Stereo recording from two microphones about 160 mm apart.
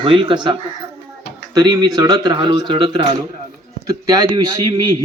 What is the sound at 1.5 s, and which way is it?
A man's voice, 25° right (ahead or behind).